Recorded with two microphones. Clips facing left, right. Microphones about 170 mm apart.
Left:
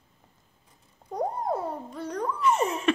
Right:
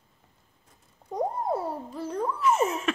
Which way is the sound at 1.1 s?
5° right (ahead or behind).